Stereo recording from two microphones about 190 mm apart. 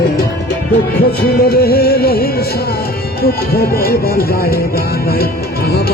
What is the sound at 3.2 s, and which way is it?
Speech, 55° left (ahead or behind).